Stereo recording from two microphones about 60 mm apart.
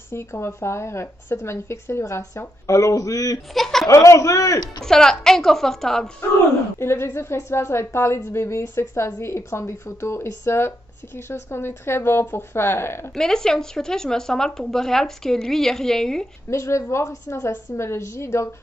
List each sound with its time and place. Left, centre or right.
0.1 s a woman's voice: left
3.5 s speech: centre
3.8 s speech: left
4.8 s speech: centre
6.8 s a woman's voice: left
13.1 s speech: centre
16.4 s a woman's voice: left